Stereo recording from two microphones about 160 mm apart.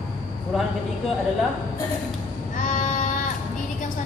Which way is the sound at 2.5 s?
50° left (ahead or behind).